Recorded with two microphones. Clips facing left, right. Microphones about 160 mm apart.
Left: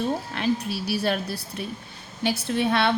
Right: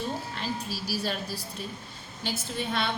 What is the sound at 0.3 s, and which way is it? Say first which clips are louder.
A woman's voice: left 8 dB; 65° left (ahead or behind).